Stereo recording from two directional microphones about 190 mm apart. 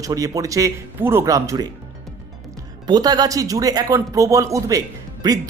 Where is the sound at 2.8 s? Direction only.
20° right (ahead or behind).